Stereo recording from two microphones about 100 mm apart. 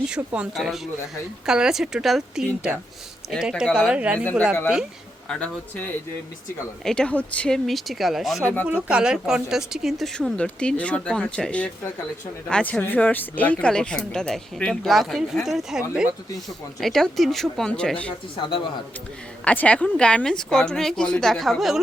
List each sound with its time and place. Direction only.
0.1 s speech: 5° right (ahead or behind)
5.3 s speech: 15° left (ahead or behind)
19.5 s speech: 15° left (ahead or behind)